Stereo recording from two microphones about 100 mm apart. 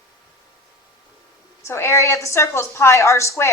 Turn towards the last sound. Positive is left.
turn(degrees=30)  # may be behind; listen again after turning